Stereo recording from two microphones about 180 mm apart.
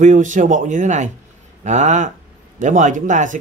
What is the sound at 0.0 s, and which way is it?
Speech, 45° right (ahead or behind).